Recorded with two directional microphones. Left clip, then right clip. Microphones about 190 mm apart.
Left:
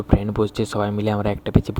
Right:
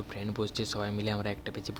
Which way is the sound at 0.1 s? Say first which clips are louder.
Left 14 dB; 45° left (ahead or behind).